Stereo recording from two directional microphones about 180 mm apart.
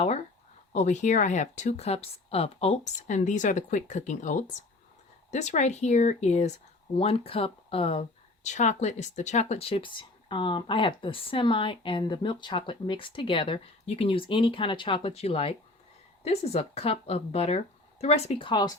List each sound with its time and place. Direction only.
0.0 s speech: 35° left (ahead or behind)